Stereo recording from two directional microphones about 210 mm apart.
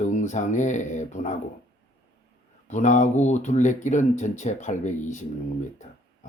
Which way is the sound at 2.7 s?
35° left (ahead or behind).